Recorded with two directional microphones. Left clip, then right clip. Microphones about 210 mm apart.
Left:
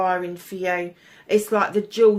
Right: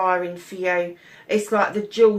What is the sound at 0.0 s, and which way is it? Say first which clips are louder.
Speech: right 1 dB; 45° left (ahead or behind).